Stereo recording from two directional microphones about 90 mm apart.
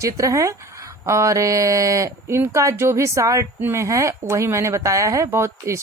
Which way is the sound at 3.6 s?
25° right (ahead or behind).